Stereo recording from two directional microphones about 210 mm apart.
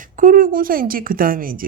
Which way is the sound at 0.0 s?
40° right (ahead or behind).